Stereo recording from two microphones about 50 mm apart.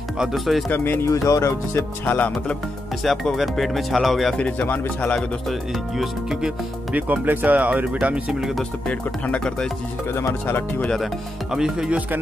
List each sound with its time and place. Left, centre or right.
0.2 s speech: centre
0.7 s speech: left
1.0 s speech: left
2.0 s speech: left
3.0 s speech: centre
4.4 s speech: left
6.9 s speech: right
8.3 s speech: centre
8.8 s speech: left
11.5 s speech: centre